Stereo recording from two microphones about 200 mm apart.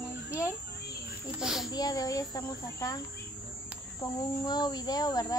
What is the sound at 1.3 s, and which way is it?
Speech, centre (ahead or behind).